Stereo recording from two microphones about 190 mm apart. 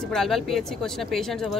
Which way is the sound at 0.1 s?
Centre (ahead or behind).